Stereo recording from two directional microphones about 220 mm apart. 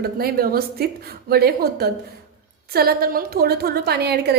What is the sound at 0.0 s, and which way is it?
A woman's voice, 45° right (ahead or behind).